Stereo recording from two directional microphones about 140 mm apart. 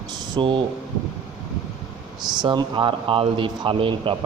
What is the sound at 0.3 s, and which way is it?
Speech, 35° right (ahead or behind).